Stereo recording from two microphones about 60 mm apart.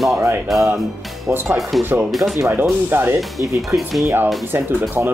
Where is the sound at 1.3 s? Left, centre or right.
Right.